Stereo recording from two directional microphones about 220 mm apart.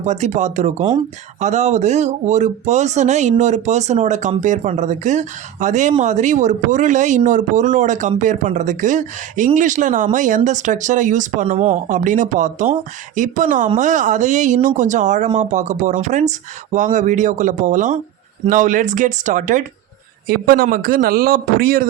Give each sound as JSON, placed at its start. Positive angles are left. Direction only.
{"t": 0.0, "sound": "a man's voice", "side_deg": -30}